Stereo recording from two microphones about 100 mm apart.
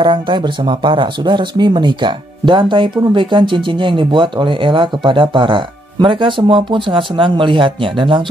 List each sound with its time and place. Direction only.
0.0 s speech: 50° right (ahead or behind)